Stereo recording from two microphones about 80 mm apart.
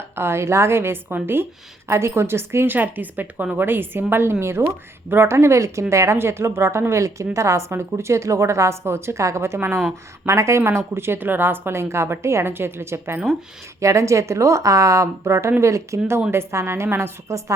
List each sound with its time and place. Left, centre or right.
0.2 s a woman's voice: right